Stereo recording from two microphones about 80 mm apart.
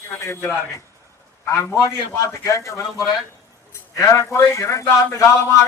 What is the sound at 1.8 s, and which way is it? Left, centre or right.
A man's voice, left.